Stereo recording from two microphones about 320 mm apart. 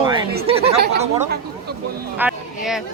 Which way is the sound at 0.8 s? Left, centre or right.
Right.